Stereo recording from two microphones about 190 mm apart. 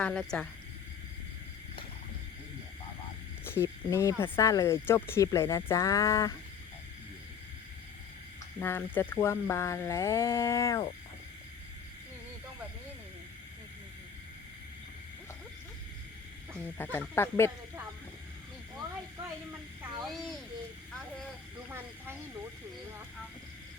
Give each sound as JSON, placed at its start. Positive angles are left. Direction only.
{"t": 0.0, "sound": "a woman's voice", "side_deg": 5}
{"t": 3.4, "sound": "speech", "side_deg": 15}
{"t": 8.5, "sound": "speech", "side_deg": 10}
{"t": 16.6, "sound": "speech", "side_deg": 10}
{"t": 20.1, "sound": "a woman's voice", "side_deg": 0}
{"t": 21.7, "sound": "snake", "side_deg": -10}